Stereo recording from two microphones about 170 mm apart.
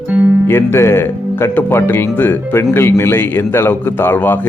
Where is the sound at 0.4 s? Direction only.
15° left (ahead or behind).